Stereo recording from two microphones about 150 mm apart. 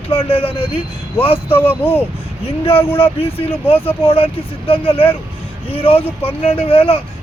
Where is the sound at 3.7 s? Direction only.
15° left (ahead or behind).